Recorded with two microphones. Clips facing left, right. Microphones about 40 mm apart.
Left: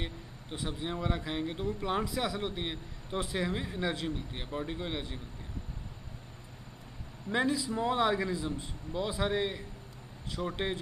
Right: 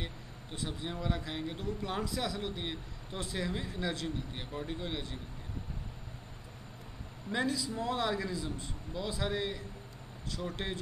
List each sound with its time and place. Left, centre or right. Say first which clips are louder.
0.0 s speech: left 3 dB; centre
7.2 s speech: left 3 dB; centre